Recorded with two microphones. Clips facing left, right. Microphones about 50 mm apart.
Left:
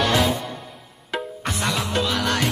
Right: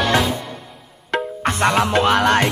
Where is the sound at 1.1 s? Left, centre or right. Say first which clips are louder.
Right 6 dB; right.